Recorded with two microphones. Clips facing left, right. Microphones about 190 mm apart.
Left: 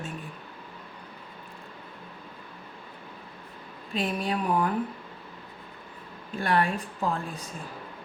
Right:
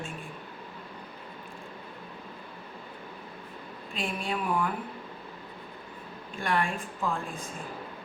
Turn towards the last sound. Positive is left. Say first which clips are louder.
# left 2 dB
turn(degrees=40)  # may be behind; listen again after turning